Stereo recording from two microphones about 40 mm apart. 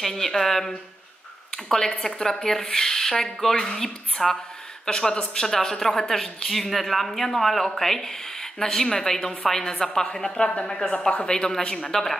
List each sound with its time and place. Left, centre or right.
0.0 s a woman's voice: centre
2.0 s a woman's voice: centre